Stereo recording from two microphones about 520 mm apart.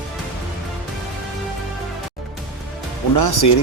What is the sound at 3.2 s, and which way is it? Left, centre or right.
Speech, left.